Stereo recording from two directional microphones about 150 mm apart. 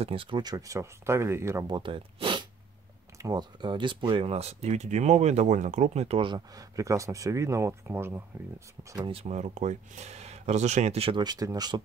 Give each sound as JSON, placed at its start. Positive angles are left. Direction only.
{"t": 0.0, "sound": "speech", "side_deg": -35}
{"t": 1.7, "sound": "speech", "side_deg": -35}
{"t": 8.9, "sound": "speech", "side_deg": -30}
{"t": 9.2, "sound": "speech", "side_deg": -50}